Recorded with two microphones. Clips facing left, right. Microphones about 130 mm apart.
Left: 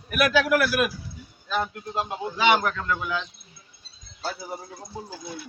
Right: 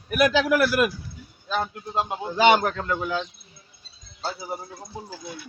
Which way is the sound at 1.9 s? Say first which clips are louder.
Right 4 dB; 30° right (ahead or behind).